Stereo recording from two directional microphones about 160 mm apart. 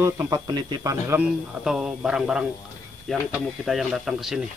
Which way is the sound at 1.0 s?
15° right (ahead or behind).